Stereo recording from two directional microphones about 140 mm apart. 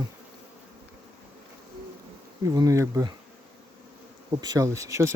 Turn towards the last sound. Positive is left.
turn(degrees=-20)  # may be behind; listen again after turning